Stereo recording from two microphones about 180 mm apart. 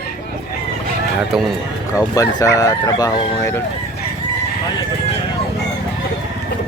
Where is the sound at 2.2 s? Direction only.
20° left (ahead or behind).